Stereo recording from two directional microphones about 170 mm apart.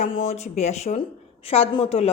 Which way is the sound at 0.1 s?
40° left (ahead or behind).